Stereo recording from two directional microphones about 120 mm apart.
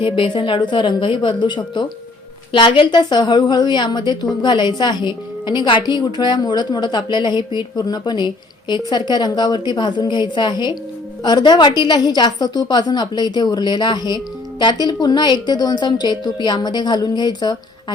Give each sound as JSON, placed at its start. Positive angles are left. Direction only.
{"t": 0.0, "sound": "a woman's voice", "side_deg": 45}